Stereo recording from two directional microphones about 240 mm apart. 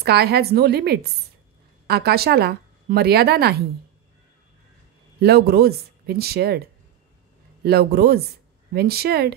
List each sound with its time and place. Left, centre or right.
0.0 s speech: right
5.2 s speech: right
7.6 s speech: right